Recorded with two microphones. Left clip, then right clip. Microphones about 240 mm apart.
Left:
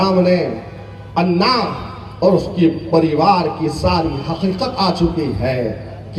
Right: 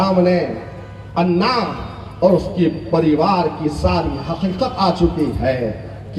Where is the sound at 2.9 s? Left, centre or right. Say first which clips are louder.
Left 2 dB; left.